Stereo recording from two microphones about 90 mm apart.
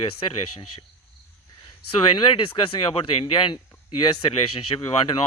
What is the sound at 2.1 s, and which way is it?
Speech, 70° left (ahead or behind).